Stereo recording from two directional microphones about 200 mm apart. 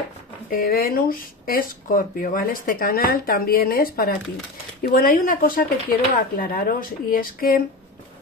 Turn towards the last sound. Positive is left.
turn(degrees=45)  # may be behind; listen again after turning